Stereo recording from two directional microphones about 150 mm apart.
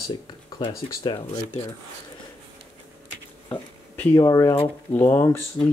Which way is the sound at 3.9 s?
20° left (ahead or behind).